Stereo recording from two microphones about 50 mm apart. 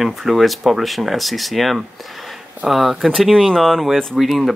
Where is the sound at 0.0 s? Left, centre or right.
Centre.